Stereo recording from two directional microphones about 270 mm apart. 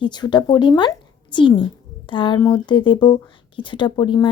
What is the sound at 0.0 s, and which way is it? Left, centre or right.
A woman's voice, centre.